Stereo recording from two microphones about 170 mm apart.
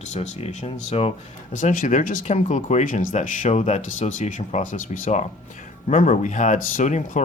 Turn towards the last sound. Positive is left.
turn(degrees=45)  # may be behind; listen again after turning